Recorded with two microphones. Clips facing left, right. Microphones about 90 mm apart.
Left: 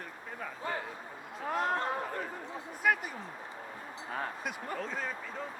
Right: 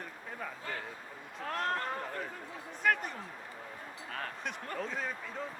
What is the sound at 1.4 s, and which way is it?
Speech, 10° left (ahead or behind).